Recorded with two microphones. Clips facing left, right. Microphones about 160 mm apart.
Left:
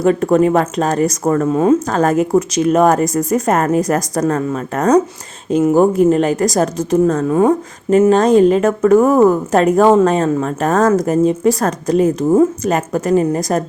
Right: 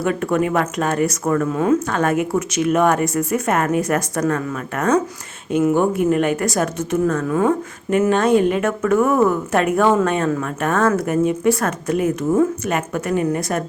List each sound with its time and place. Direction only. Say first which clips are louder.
0.0 s a woman's voice: left 7 dB; 35° left (ahead or behind)